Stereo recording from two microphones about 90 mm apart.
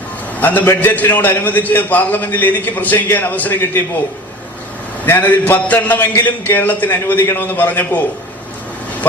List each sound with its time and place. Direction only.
0.3 s a man's voice: 20° left (ahead or behind)
5.0 s a man's voice: 20° left (ahead or behind)